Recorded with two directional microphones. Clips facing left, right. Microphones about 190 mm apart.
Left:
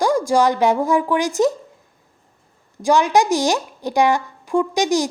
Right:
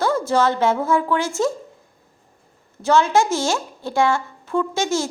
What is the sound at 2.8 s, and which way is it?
A woman's voice, 15° left (ahead or behind).